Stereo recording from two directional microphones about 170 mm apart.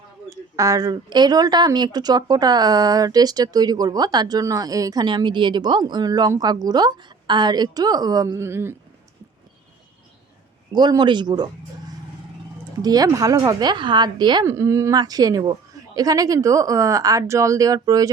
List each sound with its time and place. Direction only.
0.3 s speech: 20° right (ahead or behind)
10.7 s speech: 25° right (ahead or behind)
12.8 s speech: 20° right (ahead or behind)